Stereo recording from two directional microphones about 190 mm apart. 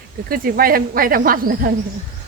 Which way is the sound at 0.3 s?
50° right (ahead or behind).